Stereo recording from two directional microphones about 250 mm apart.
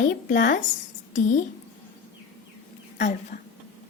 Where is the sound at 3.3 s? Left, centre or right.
Left.